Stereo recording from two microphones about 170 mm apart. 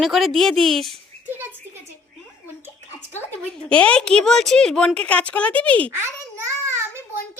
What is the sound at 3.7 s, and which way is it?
A woman's voice, 5° left (ahead or behind).